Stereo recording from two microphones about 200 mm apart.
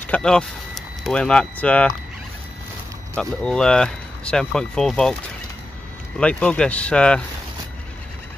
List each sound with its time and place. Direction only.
0.0 s speech: 5° left (ahead or behind)
3.2 s speech: 5° left (ahead or behind)
6.1 s speech: 5° left (ahead or behind)